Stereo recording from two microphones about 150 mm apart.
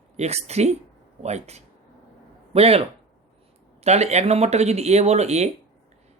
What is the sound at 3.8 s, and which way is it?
Speech, 45° right (ahead or behind).